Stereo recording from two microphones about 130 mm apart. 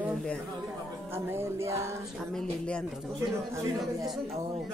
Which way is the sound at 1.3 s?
20° right (ahead or behind).